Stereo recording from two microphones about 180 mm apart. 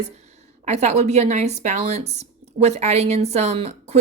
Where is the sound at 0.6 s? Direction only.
40° right (ahead or behind).